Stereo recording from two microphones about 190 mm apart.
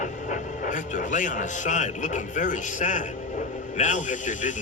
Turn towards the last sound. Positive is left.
turn(degrees=40)  # may be behind; listen again after turning